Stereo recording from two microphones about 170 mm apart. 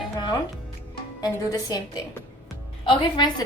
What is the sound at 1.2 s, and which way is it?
Speech, 20° left (ahead or behind).